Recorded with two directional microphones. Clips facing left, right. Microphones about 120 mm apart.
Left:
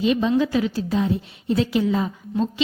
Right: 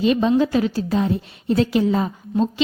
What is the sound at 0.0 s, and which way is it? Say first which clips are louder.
A woman's voice: right 2 dB; 45° right (ahead or behind).